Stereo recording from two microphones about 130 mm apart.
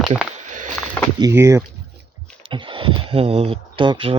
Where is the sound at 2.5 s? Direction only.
40° right (ahead or behind).